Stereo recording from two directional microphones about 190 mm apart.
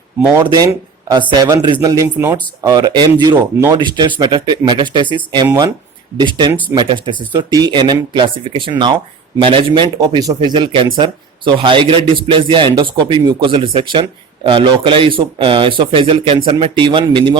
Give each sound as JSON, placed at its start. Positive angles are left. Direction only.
{"t": 0.5, "sound": "a man's voice", "side_deg": -20}